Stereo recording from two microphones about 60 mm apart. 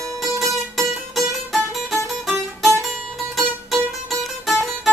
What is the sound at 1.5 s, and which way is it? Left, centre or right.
Music, centre.